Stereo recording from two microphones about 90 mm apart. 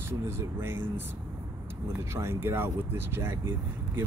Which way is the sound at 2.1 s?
30° right (ahead or behind).